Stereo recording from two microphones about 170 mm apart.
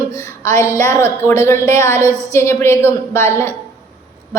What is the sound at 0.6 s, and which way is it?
Speech, 15° right (ahead or behind).